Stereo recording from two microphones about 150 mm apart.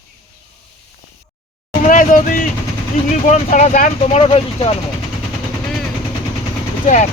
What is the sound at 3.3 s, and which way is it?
Speech, 55° left (ahead or behind).